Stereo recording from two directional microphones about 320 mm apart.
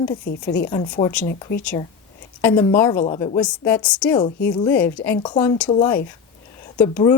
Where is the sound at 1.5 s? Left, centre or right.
Left.